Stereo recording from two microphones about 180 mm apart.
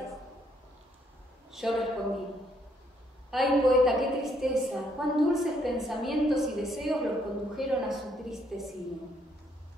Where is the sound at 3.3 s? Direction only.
Centre (ahead or behind).